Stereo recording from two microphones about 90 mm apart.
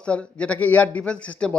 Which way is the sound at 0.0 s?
15° left (ahead or behind).